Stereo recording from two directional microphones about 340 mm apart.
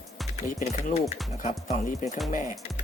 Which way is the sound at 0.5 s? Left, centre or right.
Centre.